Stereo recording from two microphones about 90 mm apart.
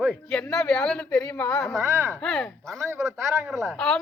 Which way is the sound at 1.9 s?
30° right (ahead or behind).